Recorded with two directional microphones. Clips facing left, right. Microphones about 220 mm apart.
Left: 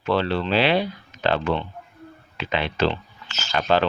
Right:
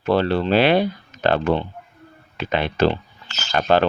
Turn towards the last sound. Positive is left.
turn(degrees=-50)  # may be behind; listen again after turning